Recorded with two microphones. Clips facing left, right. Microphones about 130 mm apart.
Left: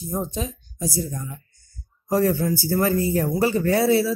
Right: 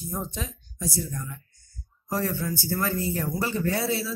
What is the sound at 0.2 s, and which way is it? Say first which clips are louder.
Speech: left 6 dB; 20° left (ahead or behind).